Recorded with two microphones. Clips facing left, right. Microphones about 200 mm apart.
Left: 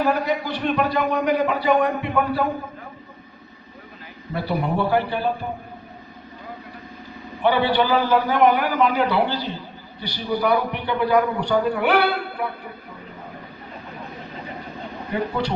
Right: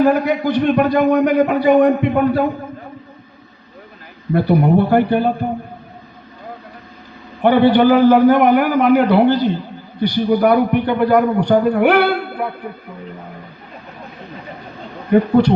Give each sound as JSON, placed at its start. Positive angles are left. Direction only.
{"t": 0.0, "sound": "a man's voice", "side_deg": -50}
{"t": 4.4, "sound": "a man's voice", "side_deg": -50}
{"t": 7.4, "sound": "a man's voice", "side_deg": -50}
{"t": 15.1, "sound": "a man's voice", "side_deg": -50}